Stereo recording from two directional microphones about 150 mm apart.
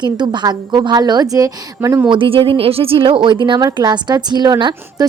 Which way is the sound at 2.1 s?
35° right (ahead or behind).